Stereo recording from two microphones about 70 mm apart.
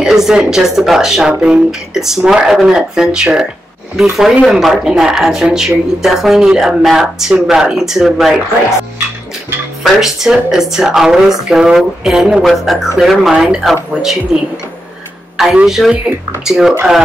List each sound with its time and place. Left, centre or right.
0.0 s speech: centre
9.9 s speech: centre
15.5 s speech: centre